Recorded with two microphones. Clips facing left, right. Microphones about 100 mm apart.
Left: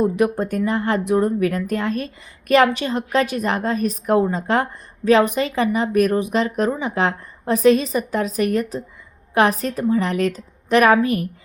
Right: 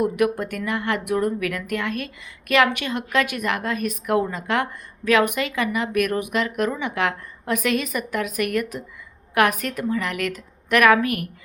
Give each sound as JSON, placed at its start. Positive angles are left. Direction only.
{"t": 0.0, "sound": "a woman's voice", "side_deg": 30}